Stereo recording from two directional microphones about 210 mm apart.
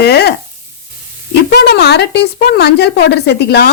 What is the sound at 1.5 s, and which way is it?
A woman's voice, 50° left (ahead or behind).